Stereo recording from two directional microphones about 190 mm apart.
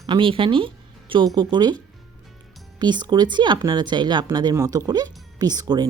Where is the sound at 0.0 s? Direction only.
25° right (ahead or behind).